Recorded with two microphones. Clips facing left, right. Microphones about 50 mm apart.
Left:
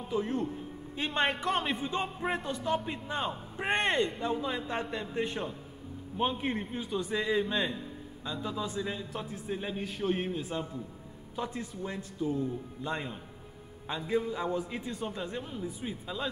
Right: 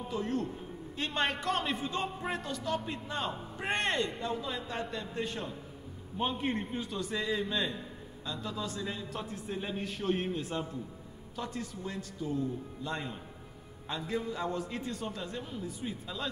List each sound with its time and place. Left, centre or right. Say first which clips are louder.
0.1 s a man's voice: left 3 dB; centre
6.1 s a man's voice: left 1 dB; centre
7.0 s a man's voice: left 4 dB; centre
11.3 s a man's voice: left 2 dB; centre